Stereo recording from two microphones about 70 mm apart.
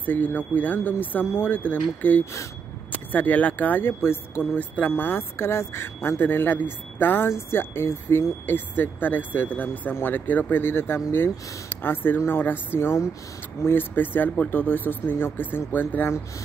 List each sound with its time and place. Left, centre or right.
0.0 s speech: left